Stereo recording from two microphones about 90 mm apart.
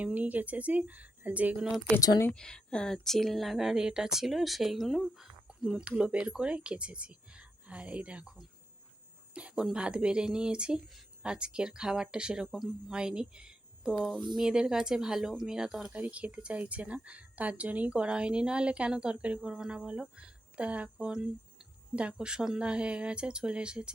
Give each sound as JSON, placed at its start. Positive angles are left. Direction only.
{"t": 0.0, "sound": "speech", "side_deg": -15}
{"t": 2.0, "sound": "speech", "side_deg": 40}
{"t": 2.3, "sound": "speech", "side_deg": 10}
{"t": 15.9, "sound": "speech", "side_deg": -15}